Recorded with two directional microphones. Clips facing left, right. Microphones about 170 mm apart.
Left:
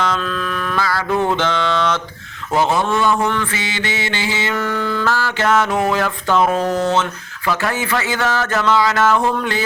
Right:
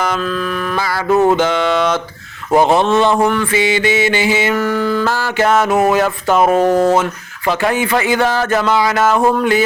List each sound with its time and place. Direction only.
0.0 s mantra: 10° right (ahead or behind)
1.1 s music: 40° right (ahead or behind)
1.4 s mantra: 15° right (ahead or behind)
2.6 s a man's voice: 20° right (ahead or behind)
3.2 s mantra: 10° right (ahead or behind)
6.6 s a sound: 50° right (ahead or behind)
7.4 s speech: 25° right (ahead or behind)
7.7 s mantra: 15° right (ahead or behind)
8.2 s a man's voice: 30° right (ahead or behind)
8.6 s mantra: 10° right (ahead or behind)